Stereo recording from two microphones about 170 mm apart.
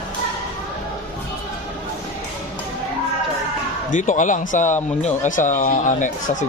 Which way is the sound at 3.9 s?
50° left (ahead or behind).